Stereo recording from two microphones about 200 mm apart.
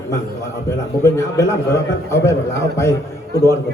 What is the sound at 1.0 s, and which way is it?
A man's voice, 15° left (ahead or behind).